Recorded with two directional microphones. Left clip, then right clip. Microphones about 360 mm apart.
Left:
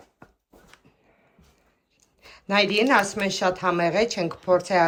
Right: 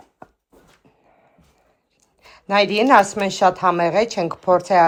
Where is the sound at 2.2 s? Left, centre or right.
Centre.